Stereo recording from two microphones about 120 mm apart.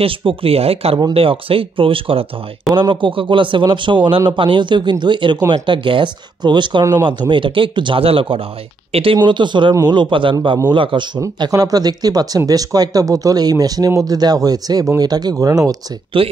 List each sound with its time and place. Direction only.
0.0 s a man's voice: 50° right (ahead or behind); by 15.8 s 30° right (ahead or behind)
16.1 s a man's voice: 45° right (ahead or behind)